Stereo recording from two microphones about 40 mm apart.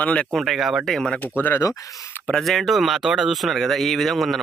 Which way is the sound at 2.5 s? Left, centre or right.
Centre.